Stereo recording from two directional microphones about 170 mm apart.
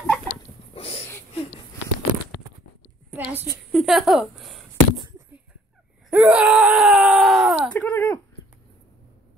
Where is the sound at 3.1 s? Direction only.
10° right (ahead or behind).